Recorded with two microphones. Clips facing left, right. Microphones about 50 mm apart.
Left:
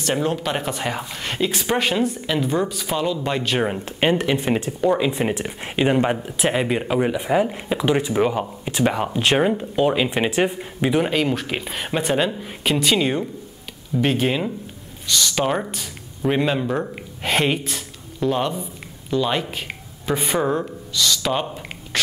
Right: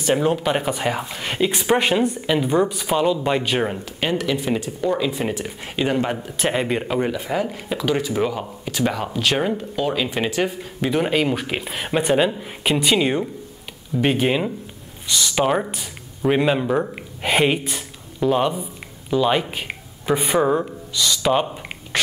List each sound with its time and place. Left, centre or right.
0.0 s speech: centre
4.0 s speech: left
6.2 s speech: centre; by 9.4 s left
9.4 s speech: centre
10.9 s speech: centre
21.9 s a sound: centre